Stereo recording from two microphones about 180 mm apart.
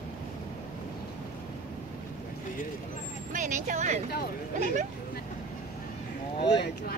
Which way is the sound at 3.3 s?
45° right (ahead or behind).